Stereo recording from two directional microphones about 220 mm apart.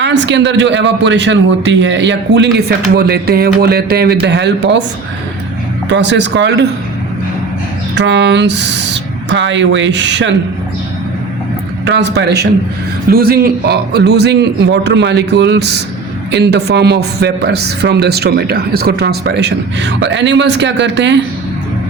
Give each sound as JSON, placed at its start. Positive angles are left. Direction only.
{"t": 0.0, "sound": "speech", "side_deg": -55}
{"t": 5.9, "sound": "speech", "side_deg": -55}
{"t": 7.9, "sound": "speech", "side_deg": -55}
{"t": 11.9, "sound": "speech", "side_deg": -50}